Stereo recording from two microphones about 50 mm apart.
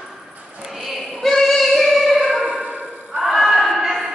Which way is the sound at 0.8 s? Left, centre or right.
Centre.